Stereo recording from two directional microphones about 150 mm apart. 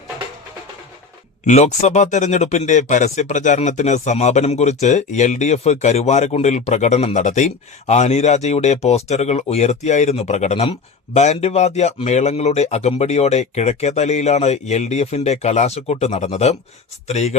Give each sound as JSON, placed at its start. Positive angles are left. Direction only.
{"t": 1.5, "sound": "speech", "side_deg": 50}